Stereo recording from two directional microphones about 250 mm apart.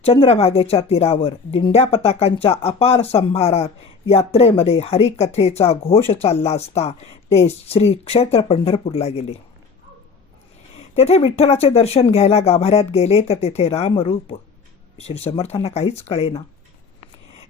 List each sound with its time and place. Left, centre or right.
0.0 s speech: left
10.9 s speech: left